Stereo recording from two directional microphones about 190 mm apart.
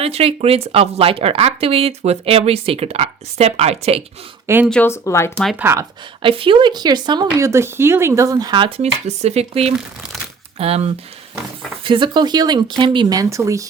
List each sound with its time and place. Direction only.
0.0 s speech: 30° right (ahead or behind)
4.4 s speech: 10° right (ahead or behind)
4.7 s speech: 10° left (ahead or behind)
5.5 s speech: 15° right (ahead or behind)
6.2 s speech: 30° right (ahead or behind)